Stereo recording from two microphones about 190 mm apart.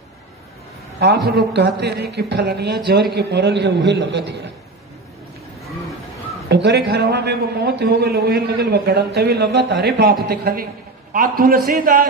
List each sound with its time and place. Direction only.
0.9 s a man's voice: 60° right (ahead or behind)
6.5 s a man's voice: 65° right (ahead or behind)